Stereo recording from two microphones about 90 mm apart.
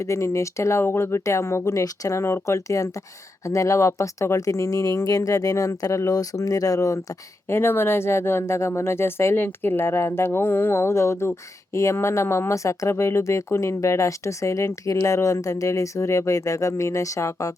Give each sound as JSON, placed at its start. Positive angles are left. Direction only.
{"t": 0.0, "sound": "speech", "side_deg": 35}
{"t": 7.5, "sound": "speech", "side_deg": 25}